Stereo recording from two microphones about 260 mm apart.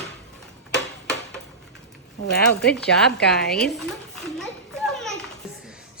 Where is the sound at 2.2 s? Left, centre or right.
Left.